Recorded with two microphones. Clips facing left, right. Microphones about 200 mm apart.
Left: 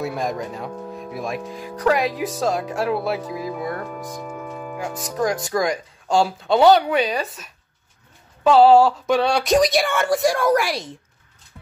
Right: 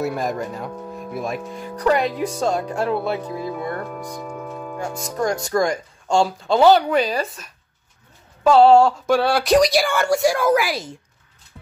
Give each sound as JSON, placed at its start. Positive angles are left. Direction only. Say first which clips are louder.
{"t": 0.0, "sound": "speech", "louder": "right 2 dB", "side_deg": 0}
{"t": 8.5, "sound": "speech", "louder": "even", "side_deg": 0}